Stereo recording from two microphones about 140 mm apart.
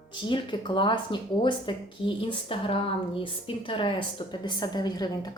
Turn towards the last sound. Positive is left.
turn(degrees=30)  # may be behind; listen again after turning